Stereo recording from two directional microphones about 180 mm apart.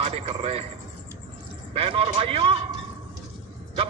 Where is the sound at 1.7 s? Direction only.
30° right (ahead or behind).